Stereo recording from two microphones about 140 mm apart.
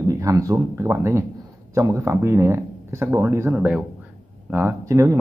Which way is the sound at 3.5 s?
10° right (ahead or behind).